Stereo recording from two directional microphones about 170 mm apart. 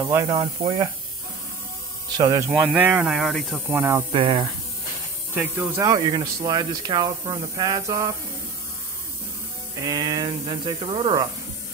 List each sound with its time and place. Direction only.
0.1 s speech: 20° right (ahead or behind)
2.1 s speech: 20° right (ahead or behind)
2.7 s speech: 10° right (ahead or behind)
3.6 s speech: 10° right (ahead or behind)
4.1 s speech: 30° right (ahead or behind)
5.3 s speech: 15° right (ahead or behind)
9.8 s speech: 25° right (ahead or behind)